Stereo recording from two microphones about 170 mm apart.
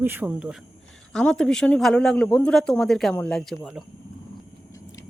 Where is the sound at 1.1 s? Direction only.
5° left (ahead or behind).